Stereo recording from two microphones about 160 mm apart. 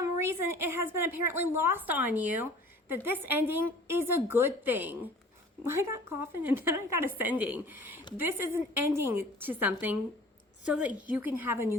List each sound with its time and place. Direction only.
0.0 s a woman's voice: 15° right (ahead or behind)